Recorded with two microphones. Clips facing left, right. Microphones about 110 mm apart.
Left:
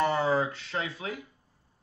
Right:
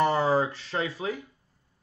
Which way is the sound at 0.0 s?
30° right (ahead or behind).